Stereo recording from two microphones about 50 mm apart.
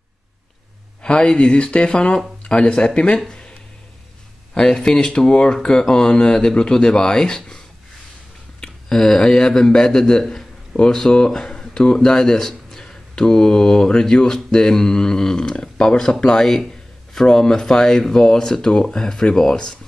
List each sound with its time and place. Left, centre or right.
1.0 s speech: centre
4.6 s speech: centre